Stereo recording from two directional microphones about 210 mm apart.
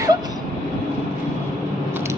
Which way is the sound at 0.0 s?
20° right (ahead or behind).